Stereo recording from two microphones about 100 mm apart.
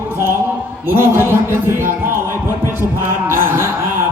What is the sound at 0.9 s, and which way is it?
Speech, 20° right (ahead or behind).